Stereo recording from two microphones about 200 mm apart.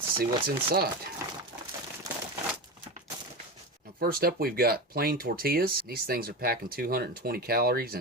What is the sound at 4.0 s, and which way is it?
Speech, 50° right (ahead or behind).